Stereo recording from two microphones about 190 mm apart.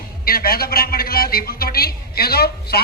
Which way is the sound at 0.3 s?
50° left (ahead or behind).